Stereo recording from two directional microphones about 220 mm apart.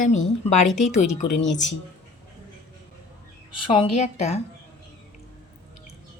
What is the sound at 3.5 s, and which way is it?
Speech, 25° left (ahead or behind).